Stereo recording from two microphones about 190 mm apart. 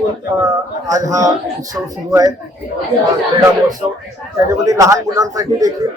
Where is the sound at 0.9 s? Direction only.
15° right (ahead or behind).